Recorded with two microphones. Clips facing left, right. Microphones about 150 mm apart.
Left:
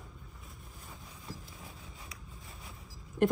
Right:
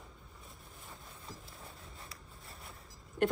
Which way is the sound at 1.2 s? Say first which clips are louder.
Left 4 dB; centre (ahead or behind).